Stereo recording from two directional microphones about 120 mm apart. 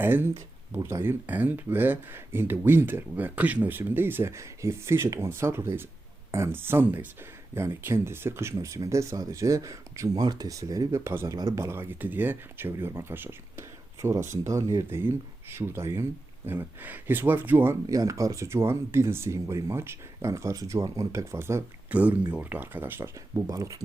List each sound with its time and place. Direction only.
0.0 s speech: 20° right (ahead or behind)
11.3 s speech: 30° right (ahead or behind)
11.6 s speech: 20° right (ahead or behind)
17.8 s speech: 30° right (ahead or behind)